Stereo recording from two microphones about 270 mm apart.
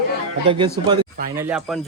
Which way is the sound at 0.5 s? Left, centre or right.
Centre.